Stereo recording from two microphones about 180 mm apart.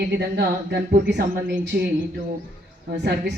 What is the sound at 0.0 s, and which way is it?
Speech, 65° right (ahead or behind).